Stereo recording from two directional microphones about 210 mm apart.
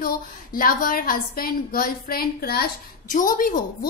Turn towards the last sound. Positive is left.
turn(degrees=40)  # may be behind; listen again after turning